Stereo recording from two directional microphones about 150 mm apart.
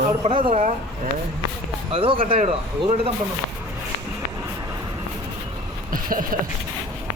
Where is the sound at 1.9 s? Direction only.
35° right (ahead or behind).